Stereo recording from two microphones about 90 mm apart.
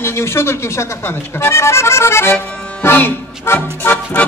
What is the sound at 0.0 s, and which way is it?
Speech, 30° left (ahead or behind).